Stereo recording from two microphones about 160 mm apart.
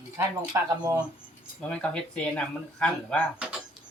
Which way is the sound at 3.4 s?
5° right (ahead or behind).